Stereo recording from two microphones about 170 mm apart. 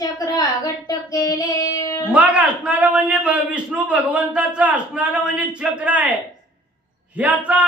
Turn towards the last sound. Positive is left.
turn(degrees=-10)  # may be behind; listen again after turning